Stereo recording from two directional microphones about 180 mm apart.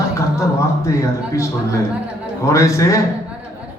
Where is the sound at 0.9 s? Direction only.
15° left (ahead or behind).